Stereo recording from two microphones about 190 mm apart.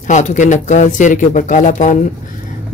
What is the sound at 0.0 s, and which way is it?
A man's voice, 40° left (ahead or behind).